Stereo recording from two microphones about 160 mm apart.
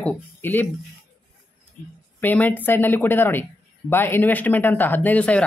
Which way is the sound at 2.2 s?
10° left (ahead or behind).